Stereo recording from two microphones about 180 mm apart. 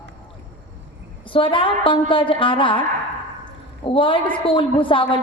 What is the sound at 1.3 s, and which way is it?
Speech, 30° left (ahead or behind).